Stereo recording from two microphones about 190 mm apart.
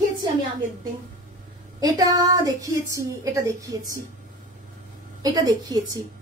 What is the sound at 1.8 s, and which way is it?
A woman's voice, 20° right (ahead or behind).